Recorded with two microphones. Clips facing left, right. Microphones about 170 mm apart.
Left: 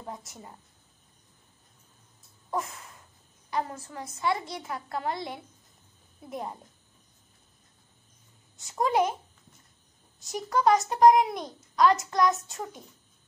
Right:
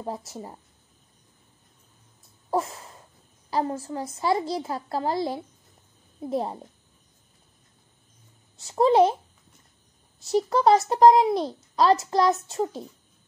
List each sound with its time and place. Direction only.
0.0 s a woman's voice: 30° right (ahead or behind)
2.5 s a sound: 30° right (ahead or behind)
3.4 s a woman's voice: 30° right (ahead or behind)
8.5 s a woman's voice: 30° right (ahead or behind)
10.2 s a woman's voice: 30° right (ahead or behind)